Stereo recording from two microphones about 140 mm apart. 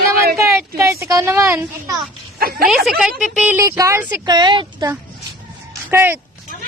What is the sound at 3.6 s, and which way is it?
Speech, 25° right (ahead or behind).